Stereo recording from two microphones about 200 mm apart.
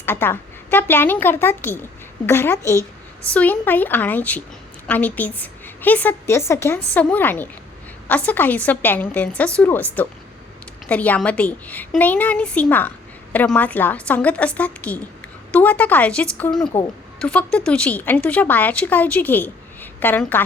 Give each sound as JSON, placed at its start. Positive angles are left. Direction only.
{"t": 0.0, "sound": "a woman's voice", "side_deg": 10}